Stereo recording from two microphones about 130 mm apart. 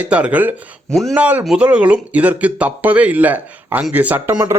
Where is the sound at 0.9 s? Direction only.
Centre (ahead or behind).